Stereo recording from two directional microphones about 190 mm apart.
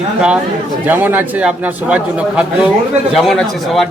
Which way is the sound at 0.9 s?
10° right (ahead or behind).